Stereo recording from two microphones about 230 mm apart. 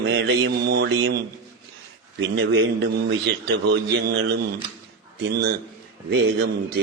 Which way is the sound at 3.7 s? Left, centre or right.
Right.